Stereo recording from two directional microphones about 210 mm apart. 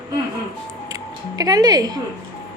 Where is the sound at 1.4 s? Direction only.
20° right (ahead or behind).